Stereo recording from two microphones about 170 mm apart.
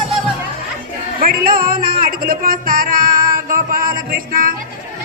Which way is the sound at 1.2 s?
60° right (ahead or behind).